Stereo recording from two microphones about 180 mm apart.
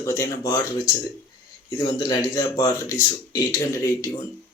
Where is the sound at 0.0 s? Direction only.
15° left (ahead or behind).